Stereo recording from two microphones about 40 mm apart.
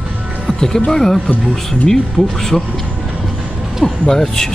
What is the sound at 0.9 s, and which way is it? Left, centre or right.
Speech, centre.